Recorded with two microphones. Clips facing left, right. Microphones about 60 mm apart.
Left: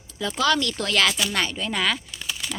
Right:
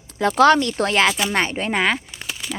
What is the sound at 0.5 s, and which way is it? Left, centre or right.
Speech, right.